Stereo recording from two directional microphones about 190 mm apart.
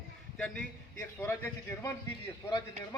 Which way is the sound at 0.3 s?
5° left (ahead or behind).